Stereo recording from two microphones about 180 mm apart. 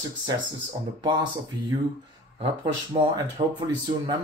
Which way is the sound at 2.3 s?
25° right (ahead or behind).